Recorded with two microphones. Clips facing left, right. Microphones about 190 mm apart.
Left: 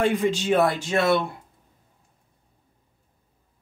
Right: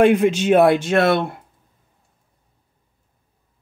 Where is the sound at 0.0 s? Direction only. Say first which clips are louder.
Right 8 dB; 80° right; by 1.3 s 55° right (ahead or behind).